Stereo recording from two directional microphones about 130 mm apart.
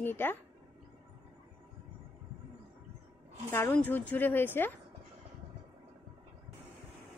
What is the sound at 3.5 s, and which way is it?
A woman's voice, 15° left (ahead or behind).